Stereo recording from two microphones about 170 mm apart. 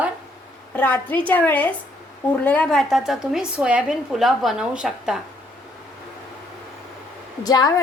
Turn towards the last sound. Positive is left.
turn(degrees=20)  # may be behind; listen again after turning